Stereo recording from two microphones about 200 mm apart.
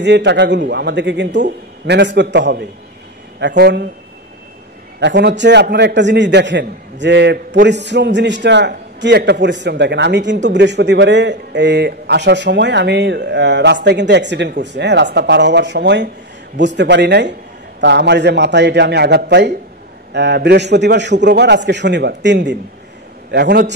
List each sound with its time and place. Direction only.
0.0 s a man's voice: 60° right (ahead or behind)
5.0 s a man's voice: 60° right (ahead or behind)